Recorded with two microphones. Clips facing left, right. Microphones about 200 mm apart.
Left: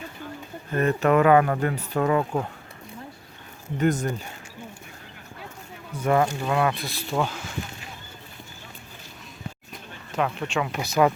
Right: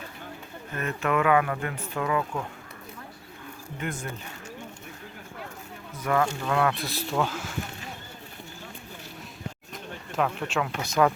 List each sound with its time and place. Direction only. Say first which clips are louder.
0.7 s speech: left 7 dB; 35° left (ahead or behind)
3.8 s speech: left 11 dB; 40° left (ahead or behind)
5.9 s speech: left 4 dB; 25° left (ahead or behind)
6.5 s speech: left 1 dB; 10° left (ahead or behind)
9.7 s a sound: left 1 dB; centre (ahead or behind)
10.8 s speech: left 2 dB; 10° left (ahead or behind)